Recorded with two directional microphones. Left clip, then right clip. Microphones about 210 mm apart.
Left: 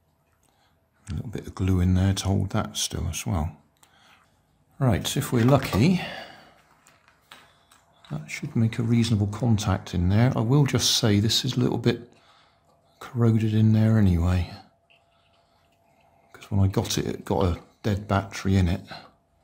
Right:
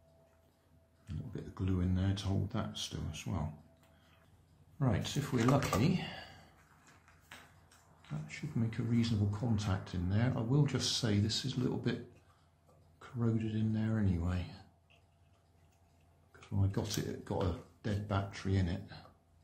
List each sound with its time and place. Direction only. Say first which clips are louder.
1.0 s speech: left 10 dB; 55° left (ahead or behind)
4.7 s speech: left 11 dB; 60° left (ahead or behind)
8.3 s speech: left 12 dB; 55° left (ahead or behind)
13.0 s speech: left 12 dB; 60° left (ahead or behind)
16.3 s speech: left 12 dB; 60° left (ahead or behind)